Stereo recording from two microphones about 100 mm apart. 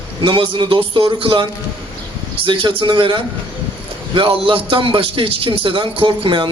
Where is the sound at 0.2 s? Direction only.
55° right (ahead or behind).